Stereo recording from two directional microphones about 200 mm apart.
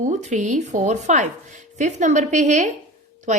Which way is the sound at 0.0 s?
35° right (ahead or behind).